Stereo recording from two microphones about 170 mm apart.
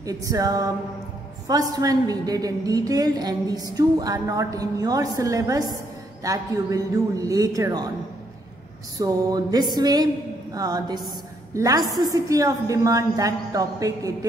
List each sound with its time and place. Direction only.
0.0 s a woman's voice: 20° right (ahead or behind)
8.9 s a woman's voice: 20° right (ahead or behind)